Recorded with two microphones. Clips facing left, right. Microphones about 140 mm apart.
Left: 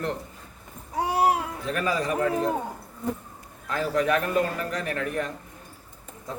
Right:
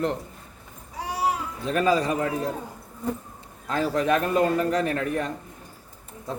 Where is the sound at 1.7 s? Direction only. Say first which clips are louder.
Right 5 dB; 25° right (ahead or behind).